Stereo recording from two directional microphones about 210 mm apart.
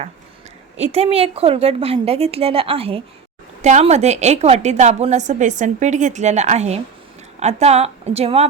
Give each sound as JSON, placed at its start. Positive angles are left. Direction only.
{"t": 0.8, "sound": "a woman's voice", "side_deg": -30}